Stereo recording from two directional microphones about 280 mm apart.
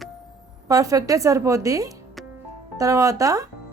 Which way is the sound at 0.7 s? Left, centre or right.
Centre.